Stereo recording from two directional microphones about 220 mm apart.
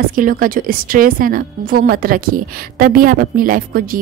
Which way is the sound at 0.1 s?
40° right (ahead or behind).